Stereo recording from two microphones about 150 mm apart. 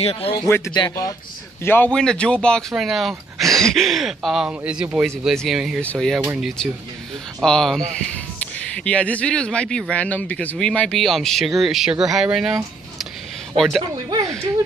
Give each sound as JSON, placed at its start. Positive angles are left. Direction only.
{"t": 0.0, "sound": "speech", "side_deg": 40}
{"t": 0.7, "sound": "speech", "side_deg": 25}
{"t": 1.6, "sound": "speech", "side_deg": 15}
{"t": 7.4, "sound": "speech", "side_deg": 5}